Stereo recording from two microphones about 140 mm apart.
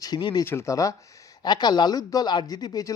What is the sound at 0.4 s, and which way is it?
Speech, 20° left (ahead or behind).